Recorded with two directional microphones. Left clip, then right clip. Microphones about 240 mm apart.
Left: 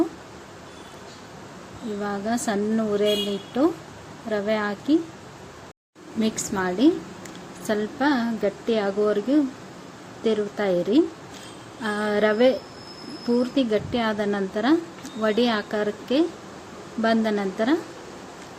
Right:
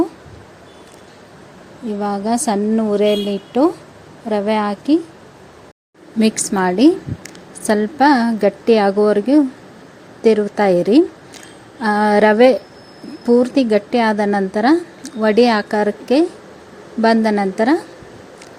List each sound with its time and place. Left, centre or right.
2.0 s a woman's voice: right
6.1 s a woman's voice: right